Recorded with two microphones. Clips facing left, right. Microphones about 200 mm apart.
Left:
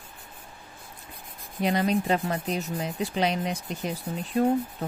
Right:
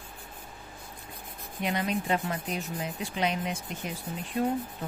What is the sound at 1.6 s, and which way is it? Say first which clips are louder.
Speech: left 5 dB; 35° left (ahead or behind).